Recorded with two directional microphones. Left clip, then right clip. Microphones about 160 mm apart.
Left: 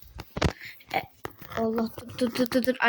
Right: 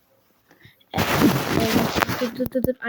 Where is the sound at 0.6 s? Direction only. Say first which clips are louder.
Left 8 dB; 15° left (ahead or behind).